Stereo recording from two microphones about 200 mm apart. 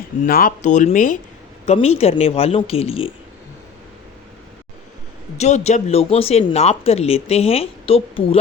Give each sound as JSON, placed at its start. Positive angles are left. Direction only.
{"t": 0.3, "sound": "speech", "side_deg": 45}
{"t": 5.4, "sound": "speech", "side_deg": 35}